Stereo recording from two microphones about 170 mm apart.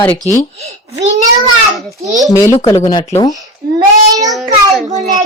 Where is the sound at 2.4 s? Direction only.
15° left (ahead or behind).